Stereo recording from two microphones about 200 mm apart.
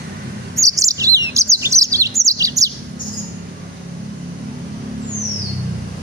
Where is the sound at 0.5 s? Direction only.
15° right (ahead or behind).